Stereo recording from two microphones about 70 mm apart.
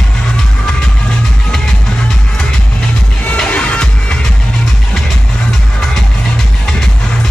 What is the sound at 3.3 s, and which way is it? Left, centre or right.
Music, centre.